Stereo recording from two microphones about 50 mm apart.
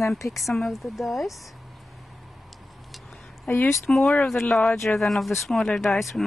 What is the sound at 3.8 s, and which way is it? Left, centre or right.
A woman's voice, centre.